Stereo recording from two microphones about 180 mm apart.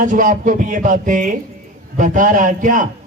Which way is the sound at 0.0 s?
45° right (ahead or behind).